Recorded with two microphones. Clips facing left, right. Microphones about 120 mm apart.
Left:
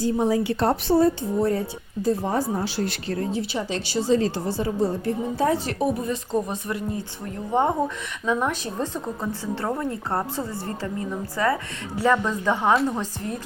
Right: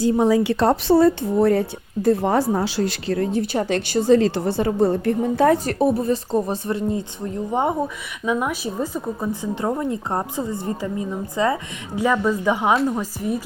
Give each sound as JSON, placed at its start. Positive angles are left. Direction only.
{"t": 0.0, "sound": "a woman's voice", "side_deg": -90}
{"t": 3.3, "sound": "a woman's voice", "side_deg": -50}
{"t": 5.6, "sound": "a woman's voice", "side_deg": -35}